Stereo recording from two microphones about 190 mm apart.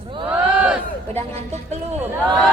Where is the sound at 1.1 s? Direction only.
35° right (ahead or behind).